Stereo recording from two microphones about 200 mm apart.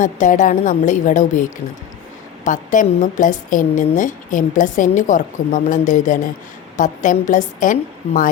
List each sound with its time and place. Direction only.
0.0 s a woman's voice: 40° left (ahead or behind)